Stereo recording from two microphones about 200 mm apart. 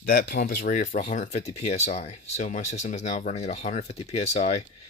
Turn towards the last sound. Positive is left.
turn(degrees=35)  # may be behind; listen again after turning